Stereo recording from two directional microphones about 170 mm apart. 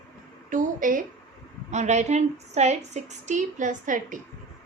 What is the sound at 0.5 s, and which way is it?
A woman's voice, 50° right (ahead or behind).